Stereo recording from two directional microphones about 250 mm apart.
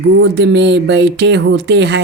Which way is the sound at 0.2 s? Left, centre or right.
Right.